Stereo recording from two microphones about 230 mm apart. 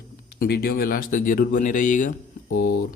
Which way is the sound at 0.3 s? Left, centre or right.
Left.